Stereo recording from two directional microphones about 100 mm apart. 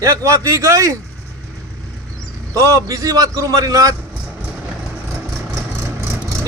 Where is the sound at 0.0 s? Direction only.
35° right (ahead or behind).